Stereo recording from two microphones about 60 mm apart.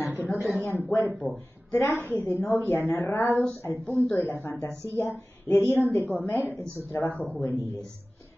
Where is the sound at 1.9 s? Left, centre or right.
Left.